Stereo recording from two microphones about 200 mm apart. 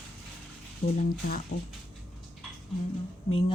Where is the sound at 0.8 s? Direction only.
45° left (ahead or behind).